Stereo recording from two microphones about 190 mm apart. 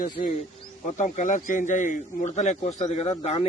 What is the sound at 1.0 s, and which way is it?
A man's voice, 40° left (ahead or behind).